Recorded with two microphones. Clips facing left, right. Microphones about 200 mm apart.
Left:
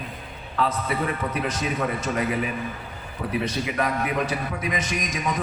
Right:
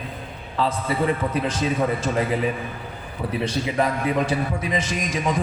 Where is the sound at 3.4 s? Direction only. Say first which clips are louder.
Right 5 dB; 30° right (ahead or behind).